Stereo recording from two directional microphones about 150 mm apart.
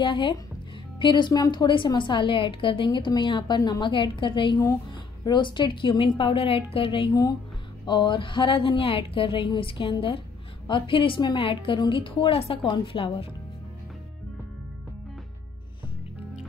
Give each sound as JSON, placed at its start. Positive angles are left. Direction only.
{"t": 0.0, "sound": "a woman's voice", "side_deg": 30}
{"t": 7.1, "sound": "a woman's voice", "side_deg": 25}